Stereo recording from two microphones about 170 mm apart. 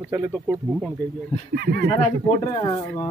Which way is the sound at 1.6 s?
70° right (ahead or behind).